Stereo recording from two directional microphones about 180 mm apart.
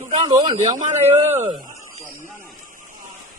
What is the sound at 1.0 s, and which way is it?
Speech, 40° right (ahead or behind).